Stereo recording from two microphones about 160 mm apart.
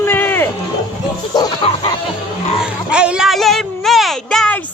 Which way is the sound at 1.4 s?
30° left (ahead or behind).